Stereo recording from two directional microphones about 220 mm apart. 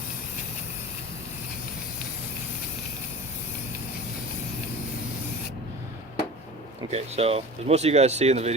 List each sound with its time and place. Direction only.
6.9 s speech: 25° right (ahead or behind)